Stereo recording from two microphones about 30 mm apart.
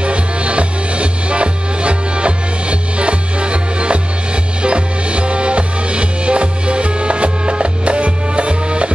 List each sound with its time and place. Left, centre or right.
0.0 s music: right